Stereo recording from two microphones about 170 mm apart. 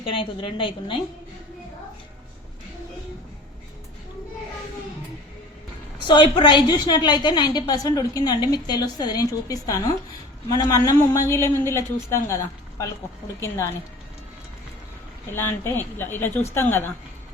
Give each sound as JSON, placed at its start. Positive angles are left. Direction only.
{"t": 0.0, "sound": "a woman's voice", "side_deg": 30}
{"t": 6.1, "sound": "a woman's voice", "side_deg": 30}
{"t": 15.3, "sound": "a woman's voice", "side_deg": 15}